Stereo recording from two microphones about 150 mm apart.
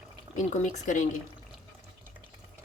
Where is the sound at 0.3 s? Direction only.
55° left (ahead or behind).